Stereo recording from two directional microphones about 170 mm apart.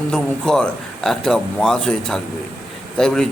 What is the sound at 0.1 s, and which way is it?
A man's voice, 5° left (ahead or behind).